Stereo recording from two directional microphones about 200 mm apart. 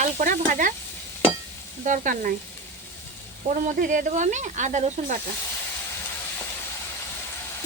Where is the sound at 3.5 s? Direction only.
40° right (ahead or behind).